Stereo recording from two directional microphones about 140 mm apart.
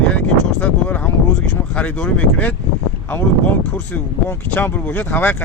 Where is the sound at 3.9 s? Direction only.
10° left (ahead or behind).